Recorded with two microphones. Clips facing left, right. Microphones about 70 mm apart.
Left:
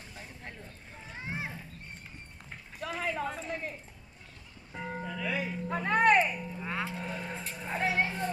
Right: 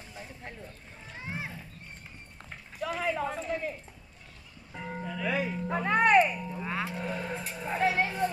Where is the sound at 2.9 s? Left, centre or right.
Right.